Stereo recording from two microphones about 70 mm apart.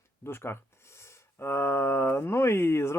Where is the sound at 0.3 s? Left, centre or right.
Left.